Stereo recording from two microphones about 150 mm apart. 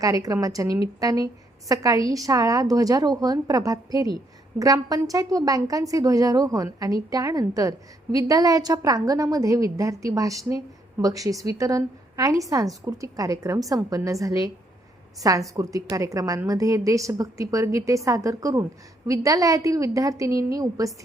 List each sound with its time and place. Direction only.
0.0 s a woman's voice: 25° right (ahead or behind)